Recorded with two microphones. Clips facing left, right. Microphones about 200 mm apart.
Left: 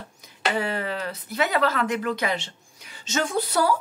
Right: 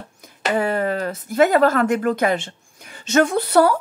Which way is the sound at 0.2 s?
50° right (ahead or behind).